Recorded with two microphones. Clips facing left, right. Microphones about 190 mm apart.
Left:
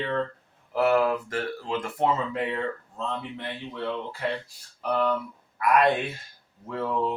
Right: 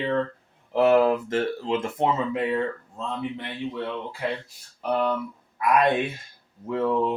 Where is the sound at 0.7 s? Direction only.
25° right (ahead or behind).